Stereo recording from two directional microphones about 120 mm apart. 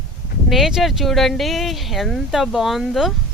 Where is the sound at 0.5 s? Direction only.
Centre (ahead or behind).